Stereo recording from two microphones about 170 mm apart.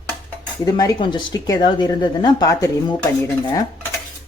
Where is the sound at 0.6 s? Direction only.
25° left (ahead or behind).